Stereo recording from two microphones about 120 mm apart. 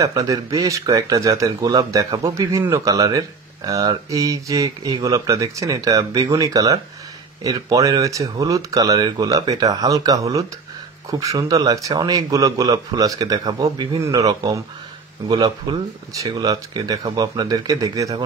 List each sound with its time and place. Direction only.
0.0 s speech: 30° right (ahead or behind)